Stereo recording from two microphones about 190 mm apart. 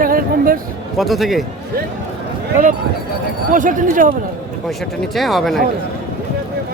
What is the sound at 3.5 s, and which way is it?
Speech, 45° right (ahead or behind).